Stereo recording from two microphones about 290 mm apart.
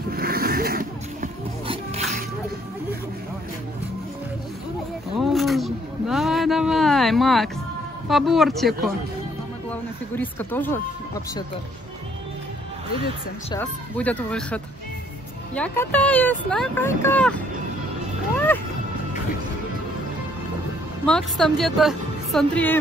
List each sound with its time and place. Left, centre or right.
0.1 s music: right
5.2 s a sound: centre
8.1 s speech: centre
9.7 s a sound: centre
13.6 s speech: centre
21.0 s a woman's voice: centre